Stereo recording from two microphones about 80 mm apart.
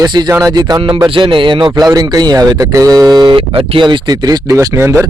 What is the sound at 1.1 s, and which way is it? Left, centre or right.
A man's voice, right.